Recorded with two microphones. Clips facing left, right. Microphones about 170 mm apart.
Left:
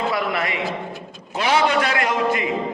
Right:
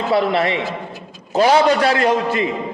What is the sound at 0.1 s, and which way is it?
A man's voice, 30° right (ahead or behind).